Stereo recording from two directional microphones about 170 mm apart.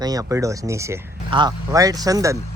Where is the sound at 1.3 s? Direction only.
25° right (ahead or behind).